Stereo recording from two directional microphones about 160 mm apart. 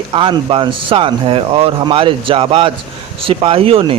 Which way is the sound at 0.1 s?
35° right (ahead or behind).